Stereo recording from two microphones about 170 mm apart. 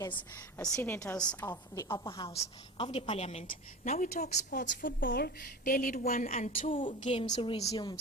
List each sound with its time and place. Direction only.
0.8 s a woman's voice: 15° left (ahead or behind); by 6.5 s 45° left (ahead or behind)
6.7 s a woman's voice: 30° left (ahead or behind)